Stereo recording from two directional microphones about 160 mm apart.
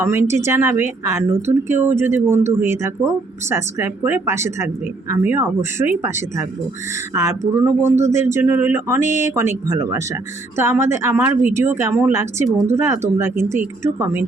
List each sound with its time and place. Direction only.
0.0 s speech: 15° right (ahead or behind)
9.0 s speech: 50° left (ahead or behind)
9.2 s speech: 15° right (ahead or behind)